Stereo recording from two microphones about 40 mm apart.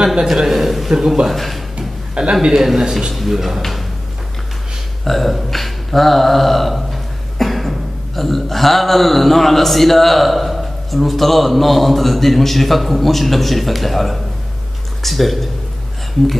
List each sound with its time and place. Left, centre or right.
0.0 s a man's voice: centre
0.5 s a man's voice: centre
1.3 s a man's voice: centre
2.4 s a man's voice: centre
5.0 s a sound: centre
8.2 s a man's voice: centre